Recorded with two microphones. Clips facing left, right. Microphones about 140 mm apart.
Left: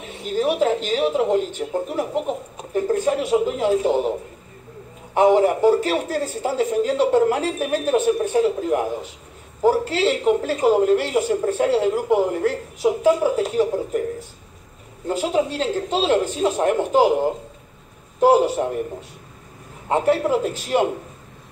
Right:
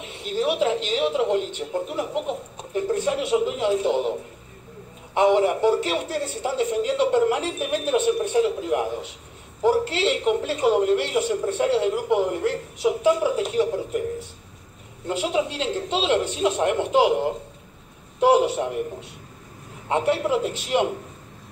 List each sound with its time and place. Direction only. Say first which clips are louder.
0.2 s a sound: left 3 dB; 45° left (ahead or behind)
0.8 s a woman's voice: left 2 dB; 40° left (ahead or behind)
5.1 s a woman's voice: left 3 dB; 40° left (ahead or behind)
15.0 s a woman's voice: left 3 dB; 40° left (ahead or behind)